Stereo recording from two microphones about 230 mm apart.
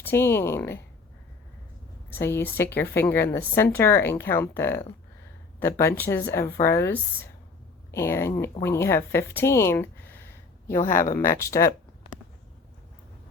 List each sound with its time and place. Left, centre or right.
0.0 s speech: centre
2.1 s speech: centre
10.7 s speech: left